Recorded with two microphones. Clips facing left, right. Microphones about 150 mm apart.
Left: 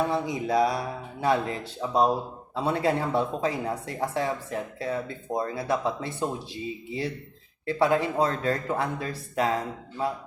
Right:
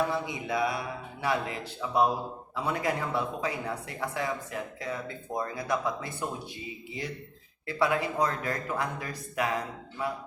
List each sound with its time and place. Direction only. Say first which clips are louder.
0.1 s speech: left 5 dB; 35° left (ahead or behind)